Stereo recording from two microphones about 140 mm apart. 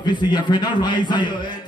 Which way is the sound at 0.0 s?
30° left (ahead or behind).